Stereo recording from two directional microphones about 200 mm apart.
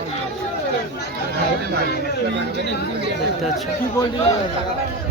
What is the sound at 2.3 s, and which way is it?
Speech, 60° right (ahead or behind).